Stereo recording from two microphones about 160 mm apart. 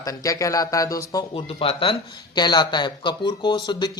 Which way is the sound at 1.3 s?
35° left (ahead or behind).